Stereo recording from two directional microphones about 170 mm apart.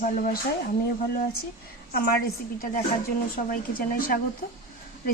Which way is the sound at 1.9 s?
60° left (ahead or behind).